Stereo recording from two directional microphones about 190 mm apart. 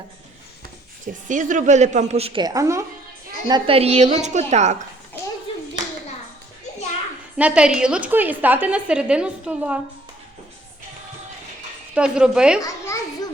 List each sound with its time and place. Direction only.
1.0 s a woman's voice: 40° right (ahead or behind); by 2.8 s 15° right (ahead or behind)
3.4 s a woman's voice: 25° right (ahead or behind)
7.3 s a woman's voice: 5° right (ahead or behind)
11.9 s speech: 5° right (ahead or behind)
12.6 s children playing: 15° left (ahead or behind)